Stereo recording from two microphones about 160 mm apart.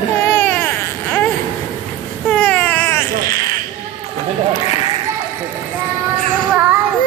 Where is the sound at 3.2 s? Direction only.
25° left (ahead or behind).